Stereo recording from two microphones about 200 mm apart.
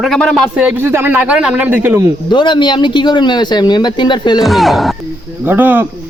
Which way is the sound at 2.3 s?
25° left (ahead or behind).